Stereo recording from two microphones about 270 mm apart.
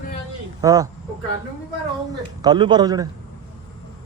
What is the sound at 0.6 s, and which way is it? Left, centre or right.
Speech, centre.